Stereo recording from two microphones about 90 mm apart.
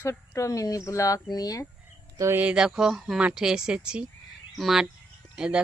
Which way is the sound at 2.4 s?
10° right (ahead or behind).